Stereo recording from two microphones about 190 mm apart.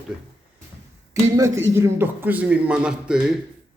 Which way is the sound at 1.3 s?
15° right (ahead or behind).